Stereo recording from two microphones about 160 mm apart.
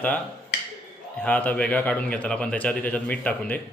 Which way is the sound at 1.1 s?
10° left (ahead or behind).